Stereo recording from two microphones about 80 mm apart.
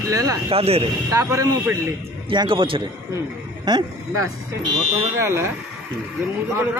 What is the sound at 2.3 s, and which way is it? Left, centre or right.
Speech, right.